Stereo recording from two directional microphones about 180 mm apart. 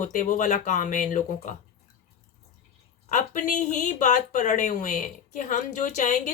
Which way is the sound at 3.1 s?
45° left (ahead or behind).